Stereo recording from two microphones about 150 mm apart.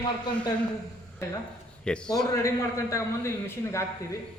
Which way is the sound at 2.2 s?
20° left (ahead or behind).